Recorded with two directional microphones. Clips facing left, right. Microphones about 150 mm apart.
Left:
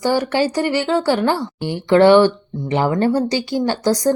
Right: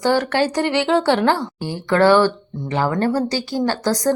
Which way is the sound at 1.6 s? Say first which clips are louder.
Left 5 dB; 20° left (ahead or behind).